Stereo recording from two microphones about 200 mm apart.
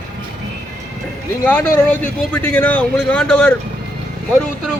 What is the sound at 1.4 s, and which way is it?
A man's voice, 5° left (ahead or behind).